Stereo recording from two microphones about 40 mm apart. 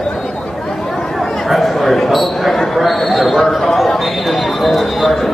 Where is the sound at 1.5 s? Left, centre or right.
Centre.